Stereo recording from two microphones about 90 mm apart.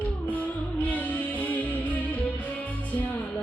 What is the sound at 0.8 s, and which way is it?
Music, 15° left (ahead or behind).